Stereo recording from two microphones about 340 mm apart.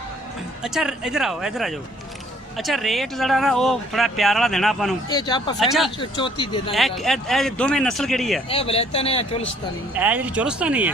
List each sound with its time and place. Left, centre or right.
0.6 s speech: centre
5.0 s speech: centre
5.5 s speech: centre
6.0 s speech: centre
6.7 s speech: centre
8.4 s speech: centre
9.9 s speech: centre